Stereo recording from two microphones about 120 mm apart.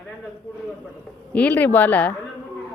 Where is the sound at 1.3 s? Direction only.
15° left (ahead or behind).